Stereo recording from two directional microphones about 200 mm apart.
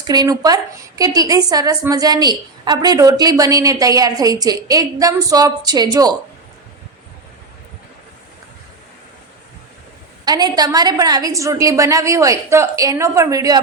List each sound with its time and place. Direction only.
0.1 s a woman's voice: 20° right (ahead or behind)
10.2 s a woman's voice: 20° right (ahead or behind)